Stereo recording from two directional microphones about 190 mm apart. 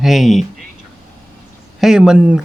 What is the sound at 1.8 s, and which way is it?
Speech, 5° right (ahead or behind).